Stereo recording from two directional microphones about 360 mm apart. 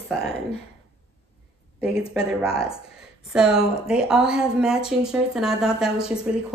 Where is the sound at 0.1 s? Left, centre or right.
Centre.